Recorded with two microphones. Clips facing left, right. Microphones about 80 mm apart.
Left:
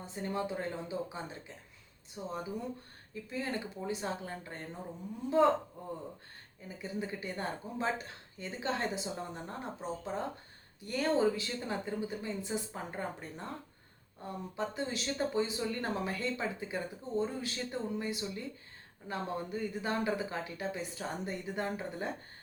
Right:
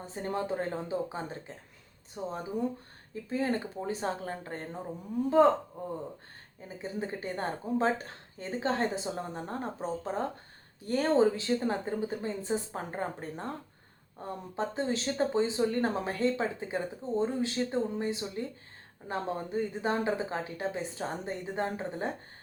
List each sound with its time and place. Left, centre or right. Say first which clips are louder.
0.0 s a woman's voice: right 2 dB; right
6.7 s a woman's voice: right 3 dB; right